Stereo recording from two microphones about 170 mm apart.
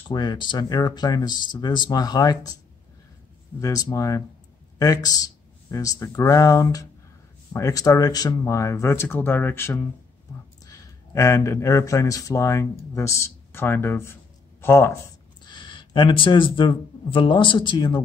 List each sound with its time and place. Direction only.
0.1 s speech: 25° left (ahead or behind)
3.6 s speech: 20° left (ahead or behind)
15.4 s speech: 25° left (ahead or behind)